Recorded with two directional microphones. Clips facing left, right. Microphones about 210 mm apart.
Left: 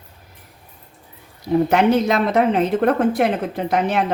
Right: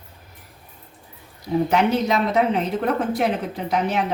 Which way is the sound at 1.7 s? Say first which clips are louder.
Left 3 dB; 55° left (ahead or behind).